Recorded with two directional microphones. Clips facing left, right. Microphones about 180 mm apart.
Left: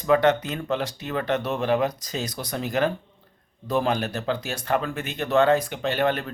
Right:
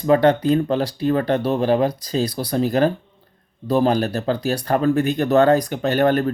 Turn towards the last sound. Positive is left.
turn(degrees=-45)  # may be behind; listen again after turning